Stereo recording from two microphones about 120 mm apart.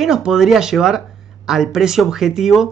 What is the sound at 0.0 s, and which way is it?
Speech, 5° right (ahead or behind).